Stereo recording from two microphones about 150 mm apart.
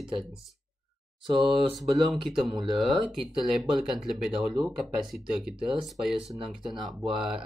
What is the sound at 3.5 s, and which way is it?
Speech, centre (ahead or behind).